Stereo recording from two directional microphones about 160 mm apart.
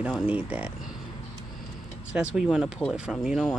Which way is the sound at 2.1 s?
5° right (ahead or behind).